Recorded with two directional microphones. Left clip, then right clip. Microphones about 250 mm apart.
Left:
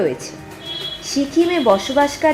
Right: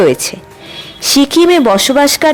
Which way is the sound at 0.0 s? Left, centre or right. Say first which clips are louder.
Right 10 dB; right.